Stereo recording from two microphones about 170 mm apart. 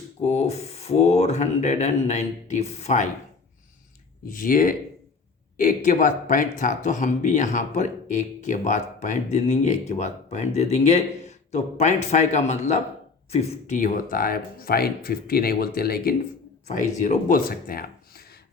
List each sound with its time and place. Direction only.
0.2 s speech: 40° left (ahead or behind)
4.3 s speech: 55° left (ahead or behind)
17.0 s speech: 50° left (ahead or behind)